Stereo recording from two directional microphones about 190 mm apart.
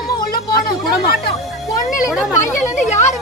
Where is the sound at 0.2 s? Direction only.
50° left (ahead or behind).